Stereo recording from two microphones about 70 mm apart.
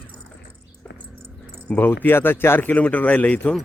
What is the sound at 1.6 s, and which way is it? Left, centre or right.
Speech, left.